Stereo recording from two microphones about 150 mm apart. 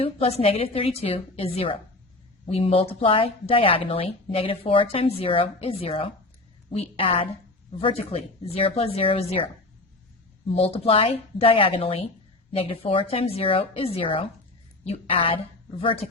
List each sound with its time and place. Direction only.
0.0 s speech: 40° left (ahead or behind)
10.5 s speech: 40° left (ahead or behind)